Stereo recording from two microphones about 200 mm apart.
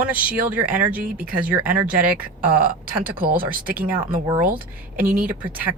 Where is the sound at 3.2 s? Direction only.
45° right (ahead or behind).